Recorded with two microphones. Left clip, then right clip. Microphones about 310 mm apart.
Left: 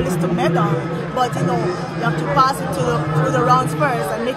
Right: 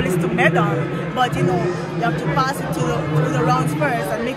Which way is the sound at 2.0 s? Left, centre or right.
Centre.